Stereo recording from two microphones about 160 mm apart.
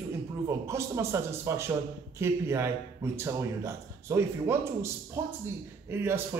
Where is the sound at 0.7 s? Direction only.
15° right (ahead or behind).